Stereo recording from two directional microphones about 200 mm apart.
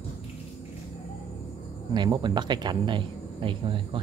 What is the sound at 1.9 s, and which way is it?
Speech, 20° right (ahead or behind).